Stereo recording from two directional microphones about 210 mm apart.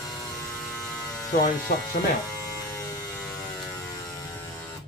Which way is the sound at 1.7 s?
45° left (ahead or behind).